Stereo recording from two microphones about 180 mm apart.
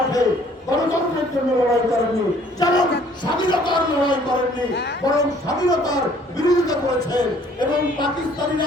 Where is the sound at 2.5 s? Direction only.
20° left (ahead or behind).